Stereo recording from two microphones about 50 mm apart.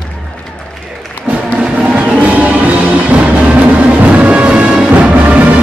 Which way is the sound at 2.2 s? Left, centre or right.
Right.